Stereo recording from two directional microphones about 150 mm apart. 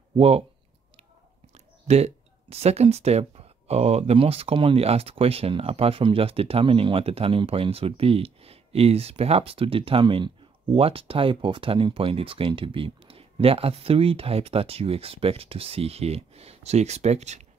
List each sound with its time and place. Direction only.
0.1 s speech: 40° right (ahead or behind)
1.9 s speech: 45° right (ahead or behind)